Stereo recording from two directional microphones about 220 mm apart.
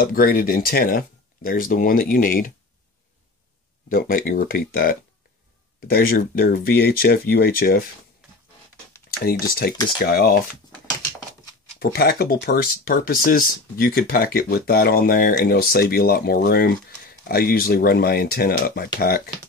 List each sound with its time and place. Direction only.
0.0 s speech: 40° left (ahead or behind)
3.9 s speech: 40° left (ahead or behind)
9.2 s speech: 45° left (ahead or behind)
11.8 s speech: 45° left (ahead or behind)